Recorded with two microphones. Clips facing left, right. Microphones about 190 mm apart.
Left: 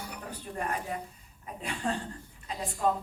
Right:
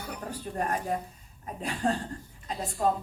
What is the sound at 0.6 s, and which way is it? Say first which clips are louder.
A woman's voice: right 4 dB; 40° right (ahead or behind).